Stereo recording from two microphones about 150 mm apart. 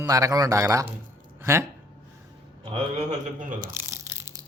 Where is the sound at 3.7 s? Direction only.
20° right (ahead or behind).